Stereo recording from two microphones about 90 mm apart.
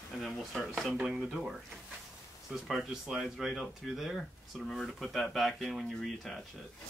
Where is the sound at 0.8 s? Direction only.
15° right (ahead or behind).